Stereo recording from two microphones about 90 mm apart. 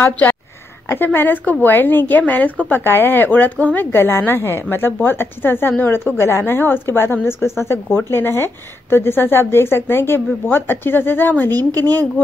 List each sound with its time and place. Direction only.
0.0 s speech: 20° left (ahead or behind)